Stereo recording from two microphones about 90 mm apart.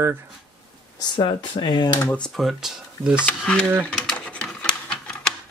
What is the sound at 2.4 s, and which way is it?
Speech, centre (ahead or behind).